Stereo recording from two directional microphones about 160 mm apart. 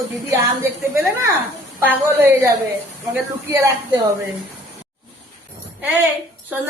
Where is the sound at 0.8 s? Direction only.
20° right (ahead or behind).